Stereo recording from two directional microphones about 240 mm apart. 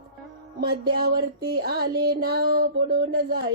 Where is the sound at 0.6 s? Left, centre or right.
Right.